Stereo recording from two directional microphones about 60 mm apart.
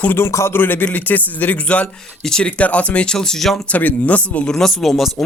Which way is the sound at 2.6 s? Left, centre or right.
Left.